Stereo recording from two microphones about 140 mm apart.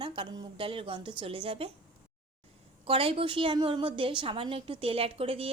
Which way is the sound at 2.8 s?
40° right (ahead or behind).